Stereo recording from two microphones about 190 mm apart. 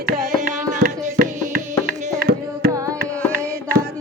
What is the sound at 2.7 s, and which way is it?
Carnatic music, 15° right (ahead or behind).